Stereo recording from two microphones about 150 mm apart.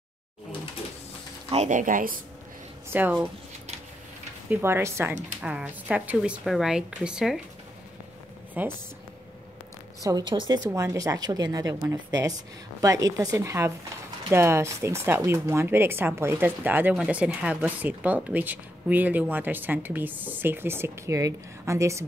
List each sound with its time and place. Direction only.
1.5 s speech: 50° right (ahead or behind)
2.9 s speech: 10° right (ahead or behind)
4.5 s speech: 15° right (ahead or behind)
8.6 s speech: 10° right (ahead or behind)
10.0 s speech: 30° right (ahead or behind)